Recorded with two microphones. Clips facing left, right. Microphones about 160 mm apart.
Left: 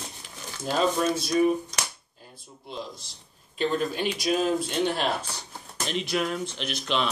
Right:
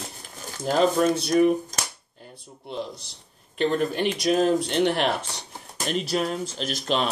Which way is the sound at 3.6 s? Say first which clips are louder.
Right 3 dB; 55° right (ahead or behind).